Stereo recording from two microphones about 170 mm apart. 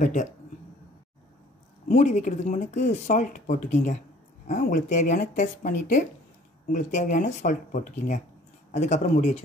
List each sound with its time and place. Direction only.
0.0 s speech: 45° left (ahead or behind)
1.9 s speech: 45° left (ahead or behind)